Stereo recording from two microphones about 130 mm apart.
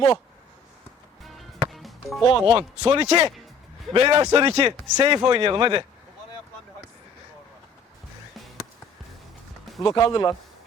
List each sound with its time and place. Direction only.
1.2 s music: centre (ahead or behind)
2.5 s a man's voice: 30° right (ahead or behind)
9.8 s speech: 30° left (ahead or behind)